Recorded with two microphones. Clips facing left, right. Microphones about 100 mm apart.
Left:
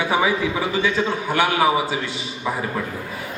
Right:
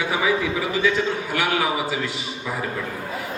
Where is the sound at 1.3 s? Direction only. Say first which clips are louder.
Left 6 dB; 30° left (ahead or behind).